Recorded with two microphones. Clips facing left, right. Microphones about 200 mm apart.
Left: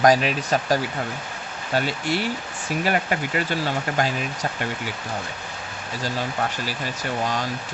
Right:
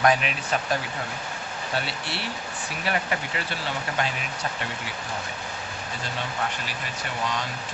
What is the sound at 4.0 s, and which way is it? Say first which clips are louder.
Speech: left 5 dB; 40° left (ahead or behind).